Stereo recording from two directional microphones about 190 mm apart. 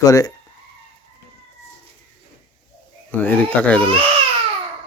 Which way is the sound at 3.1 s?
10° left (ahead or behind).